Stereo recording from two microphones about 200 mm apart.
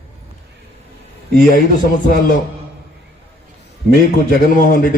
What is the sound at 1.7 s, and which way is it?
Speech, 45° left (ahead or behind).